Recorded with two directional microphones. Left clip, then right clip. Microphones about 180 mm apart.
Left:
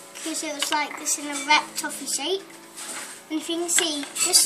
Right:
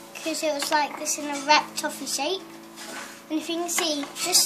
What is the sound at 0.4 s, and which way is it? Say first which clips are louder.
A woman's voice: right 2 dB; 30° right (ahead or behind).